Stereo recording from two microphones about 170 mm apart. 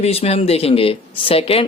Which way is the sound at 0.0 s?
35° left (ahead or behind).